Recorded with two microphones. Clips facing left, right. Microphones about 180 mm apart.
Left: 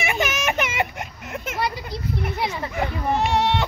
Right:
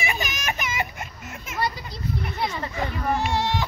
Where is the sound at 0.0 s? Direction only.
65° left (ahead or behind).